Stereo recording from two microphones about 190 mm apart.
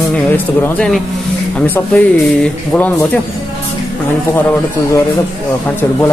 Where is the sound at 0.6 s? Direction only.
5° left (ahead or behind).